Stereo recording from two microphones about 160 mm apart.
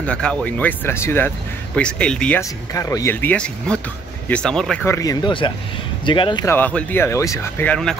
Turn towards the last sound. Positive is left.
turn(degrees=5)  # may be behind; listen again after turning